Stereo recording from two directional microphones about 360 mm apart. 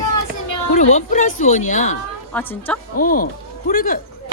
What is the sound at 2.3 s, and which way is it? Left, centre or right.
Speech, centre.